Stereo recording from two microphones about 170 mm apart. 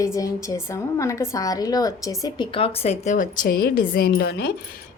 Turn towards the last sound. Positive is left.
turn(degrees=70)  # may be behind; listen again after turning